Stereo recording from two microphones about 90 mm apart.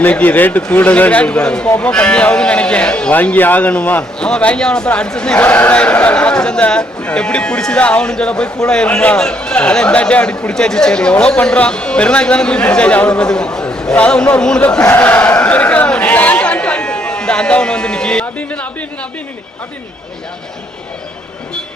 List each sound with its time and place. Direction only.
0.0 s a man's voice: 15° left (ahead or behind)
14.8 s chatter: 20° left (ahead or behind)